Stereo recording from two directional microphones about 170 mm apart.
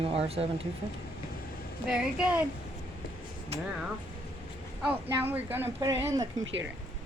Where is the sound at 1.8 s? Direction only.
5° right (ahead or behind).